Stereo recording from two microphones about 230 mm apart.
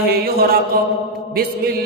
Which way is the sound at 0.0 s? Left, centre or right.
Right.